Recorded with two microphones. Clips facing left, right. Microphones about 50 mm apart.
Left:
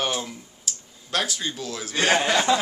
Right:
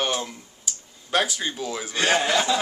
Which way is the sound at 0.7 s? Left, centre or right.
Centre.